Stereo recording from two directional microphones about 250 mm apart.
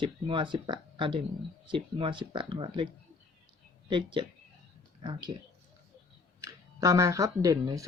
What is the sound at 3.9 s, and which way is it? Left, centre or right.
Speech, centre.